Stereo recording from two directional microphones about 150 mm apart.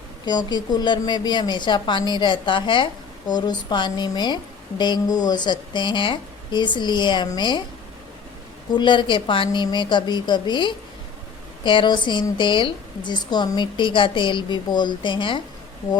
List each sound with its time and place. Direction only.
0.3 s a woman's voice: 30° left (ahead or behind)
8.7 s a woman's voice: 30° left (ahead or behind)